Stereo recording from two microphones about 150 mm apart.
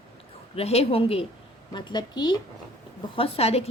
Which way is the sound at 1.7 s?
30° left (ahead or behind).